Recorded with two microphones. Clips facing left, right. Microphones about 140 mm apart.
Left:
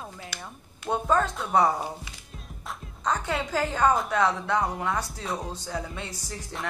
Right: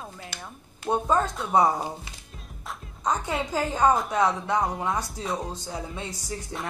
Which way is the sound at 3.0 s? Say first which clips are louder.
Right 1 dB; 20° right (ahead or behind).